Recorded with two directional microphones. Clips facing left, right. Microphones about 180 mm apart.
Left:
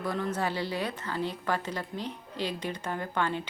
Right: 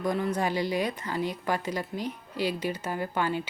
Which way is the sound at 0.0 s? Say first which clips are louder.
Right 3 dB; 15° right (ahead or behind).